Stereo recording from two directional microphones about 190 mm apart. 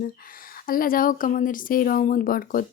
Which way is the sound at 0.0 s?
50° left (ahead or behind).